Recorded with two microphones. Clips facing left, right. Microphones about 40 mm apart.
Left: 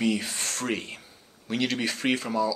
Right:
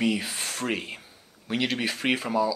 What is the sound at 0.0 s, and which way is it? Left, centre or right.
Speech, centre.